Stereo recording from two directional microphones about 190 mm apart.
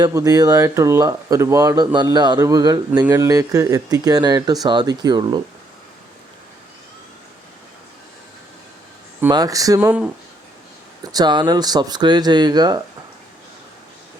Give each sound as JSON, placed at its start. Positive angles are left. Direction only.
{"t": 0.0, "sound": "a man's voice", "side_deg": -20}
{"t": 9.3, "sound": "a man's voice", "side_deg": -20}
{"t": 11.1, "sound": "a man's voice", "side_deg": -20}